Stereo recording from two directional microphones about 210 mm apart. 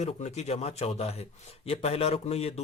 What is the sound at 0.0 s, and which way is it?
A man's voice, 30° left (ahead or behind).